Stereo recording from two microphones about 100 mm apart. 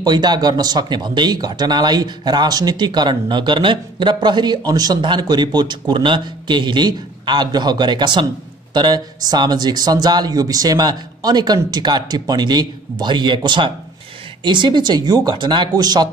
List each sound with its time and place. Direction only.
0.0 s speech: 45° right (ahead or behind)